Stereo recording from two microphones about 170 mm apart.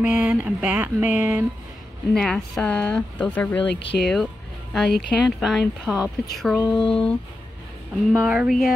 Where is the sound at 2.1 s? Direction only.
5° left (ahead or behind).